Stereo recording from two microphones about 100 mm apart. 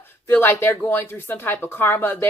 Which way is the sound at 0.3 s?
20° left (ahead or behind).